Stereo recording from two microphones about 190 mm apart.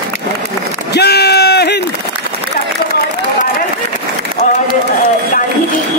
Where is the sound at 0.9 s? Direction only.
60° left (ahead or behind).